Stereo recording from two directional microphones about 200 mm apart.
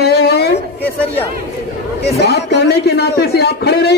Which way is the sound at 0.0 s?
50° left (ahead or behind).